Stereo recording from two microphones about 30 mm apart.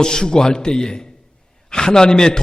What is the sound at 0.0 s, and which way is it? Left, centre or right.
A man's voice, left.